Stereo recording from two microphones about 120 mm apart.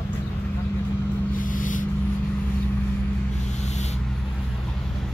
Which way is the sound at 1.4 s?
90° left.